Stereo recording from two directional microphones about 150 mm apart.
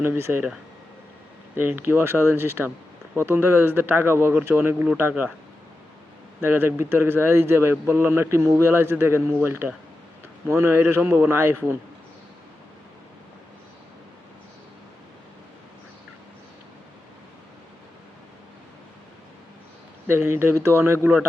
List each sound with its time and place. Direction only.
0.0 s speech: 15° right (ahead or behind)
1.5 s speech: 15° right (ahead or behind)
6.4 s speech: 15° right (ahead or behind)
20.1 s speech: 15° right (ahead or behind)